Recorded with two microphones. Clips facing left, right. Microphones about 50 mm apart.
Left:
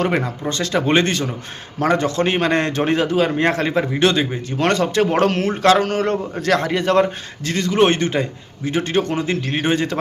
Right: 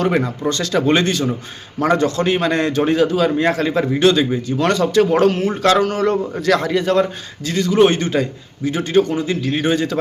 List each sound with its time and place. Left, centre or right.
0.0 s a man's voice: left